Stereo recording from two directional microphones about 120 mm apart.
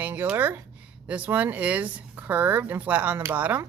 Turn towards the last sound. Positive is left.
turn(degrees=-15)  # may be behind; listen again after turning